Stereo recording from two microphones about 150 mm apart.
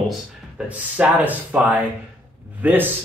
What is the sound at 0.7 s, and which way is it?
Speech, 10° right (ahead or behind).